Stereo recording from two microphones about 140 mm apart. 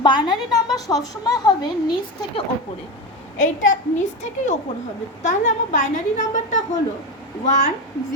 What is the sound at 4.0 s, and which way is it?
A woman's voice, 60° left (ahead or behind).